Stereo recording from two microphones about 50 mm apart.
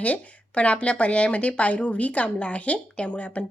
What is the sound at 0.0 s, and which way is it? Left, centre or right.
A woman's voice, left.